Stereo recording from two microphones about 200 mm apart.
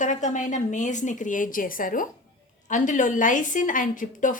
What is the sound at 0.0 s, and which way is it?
A woman's voice, 40° left (ahead or behind).